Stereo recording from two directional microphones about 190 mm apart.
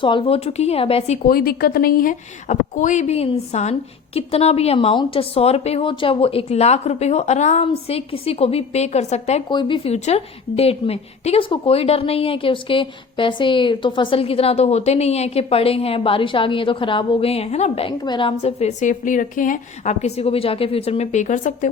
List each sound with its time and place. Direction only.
0.0 s a woman's voice: 30° left (ahead or behind)
9.5 s a woman's voice: 25° left (ahead or behind); by 21.7 s 40° left (ahead or behind)